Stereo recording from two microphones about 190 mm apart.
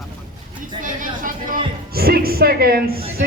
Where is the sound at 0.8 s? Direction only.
45° right (ahead or behind).